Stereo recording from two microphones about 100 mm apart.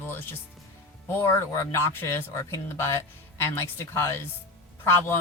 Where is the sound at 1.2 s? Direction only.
25° left (ahead or behind).